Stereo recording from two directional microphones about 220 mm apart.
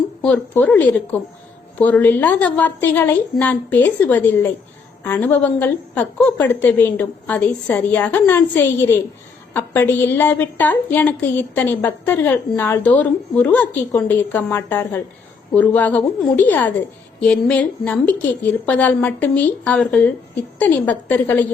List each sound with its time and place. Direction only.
0.2 s a woman's voice: 5° left (ahead or behind)